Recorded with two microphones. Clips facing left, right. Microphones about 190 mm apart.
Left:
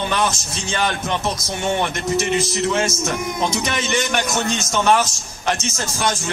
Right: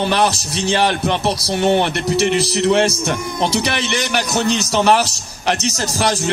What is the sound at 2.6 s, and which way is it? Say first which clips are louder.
Speech: right 5 dB; 35° right (ahead or behind).